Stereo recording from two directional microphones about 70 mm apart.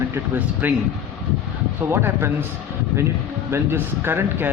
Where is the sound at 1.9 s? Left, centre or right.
Right.